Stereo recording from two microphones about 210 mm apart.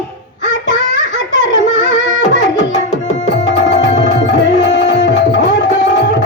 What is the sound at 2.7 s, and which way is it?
Tabla, 30° left (ahead or behind).